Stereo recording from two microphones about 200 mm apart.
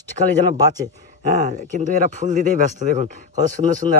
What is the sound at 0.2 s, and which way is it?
Speech, 40° right (ahead or behind).